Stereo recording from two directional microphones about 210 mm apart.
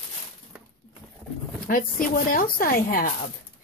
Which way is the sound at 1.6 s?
40° left (ahead or behind).